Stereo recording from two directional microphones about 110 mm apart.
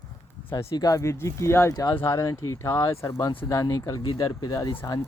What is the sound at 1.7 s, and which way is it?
Speech, 35° left (ahead or behind).